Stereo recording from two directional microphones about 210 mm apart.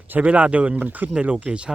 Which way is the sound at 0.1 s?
5° right (ahead or behind).